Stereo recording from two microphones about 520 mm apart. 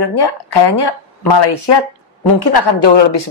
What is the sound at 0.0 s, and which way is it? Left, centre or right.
A man's voice, left.